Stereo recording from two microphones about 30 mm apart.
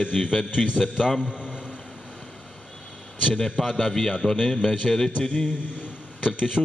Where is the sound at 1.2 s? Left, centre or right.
Right.